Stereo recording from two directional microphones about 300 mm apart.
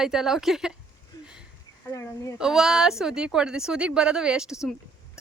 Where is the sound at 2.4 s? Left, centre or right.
Centre.